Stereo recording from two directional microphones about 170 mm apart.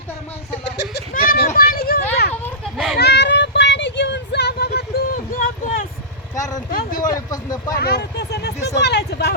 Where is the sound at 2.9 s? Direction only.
80° left; by 5.8 s 60° left (ahead or behind).